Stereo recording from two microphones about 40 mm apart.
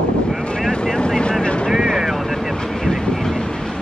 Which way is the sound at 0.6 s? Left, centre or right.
Centre.